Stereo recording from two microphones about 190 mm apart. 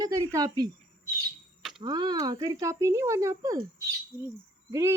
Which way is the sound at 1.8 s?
20° right (ahead or behind).